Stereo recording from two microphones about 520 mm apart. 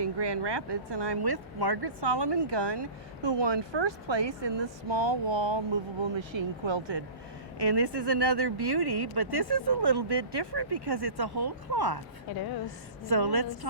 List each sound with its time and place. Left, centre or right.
0.0 s speech: right
13.1 s speech: right